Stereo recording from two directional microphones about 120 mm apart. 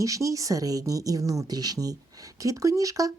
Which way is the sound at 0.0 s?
25° right (ahead or behind).